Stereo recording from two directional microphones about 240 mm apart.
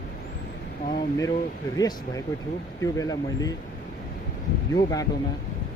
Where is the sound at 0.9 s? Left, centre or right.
Centre.